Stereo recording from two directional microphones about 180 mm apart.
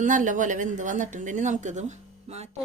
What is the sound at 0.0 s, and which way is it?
Speech, 45° right (ahead or behind).